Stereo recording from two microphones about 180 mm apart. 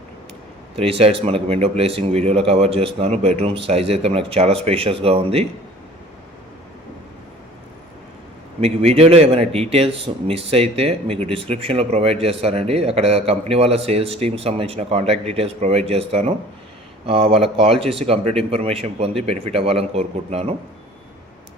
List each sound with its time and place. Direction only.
0.8 s speech: 35° right (ahead or behind)
8.6 s speech: 35° right (ahead or behind)